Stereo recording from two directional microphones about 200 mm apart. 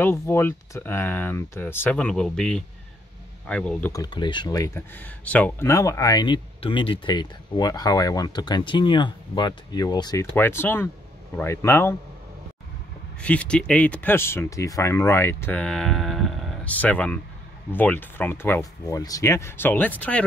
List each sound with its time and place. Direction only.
0.0 s speech: 10° left (ahead or behind)
3.9 s speech: 20° left (ahead or behind)
13.2 s speech: 5° left (ahead or behind)